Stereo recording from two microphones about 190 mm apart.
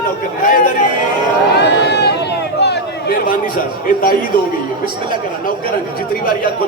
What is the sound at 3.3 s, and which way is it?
Speech, 50° left (ahead or behind).